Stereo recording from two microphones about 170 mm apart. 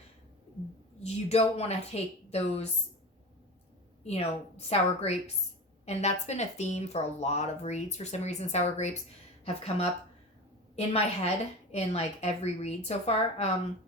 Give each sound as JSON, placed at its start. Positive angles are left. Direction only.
{"t": 0.9, "sound": "speech", "side_deg": 40}
{"t": 4.0, "sound": "speech", "side_deg": 40}